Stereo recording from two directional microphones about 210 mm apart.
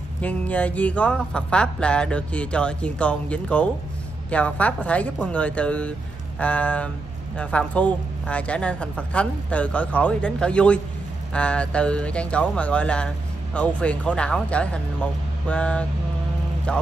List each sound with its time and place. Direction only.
0.2 s speech: 5° left (ahead or behind)